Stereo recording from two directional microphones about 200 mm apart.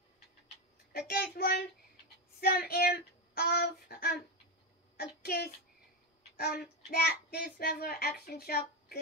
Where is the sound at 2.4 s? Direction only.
50° left (ahead or behind).